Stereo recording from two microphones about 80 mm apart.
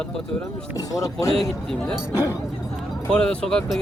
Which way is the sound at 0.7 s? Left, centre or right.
Left.